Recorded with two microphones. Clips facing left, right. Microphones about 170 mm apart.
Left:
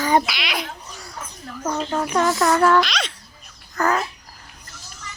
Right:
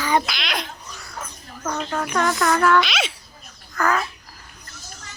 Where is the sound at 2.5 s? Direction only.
25° left (ahead or behind).